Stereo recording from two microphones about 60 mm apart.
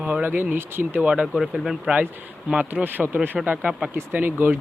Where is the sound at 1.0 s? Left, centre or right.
Right.